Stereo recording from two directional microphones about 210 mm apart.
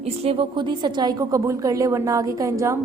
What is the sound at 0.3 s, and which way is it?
A woman's voice, 25° right (ahead or behind).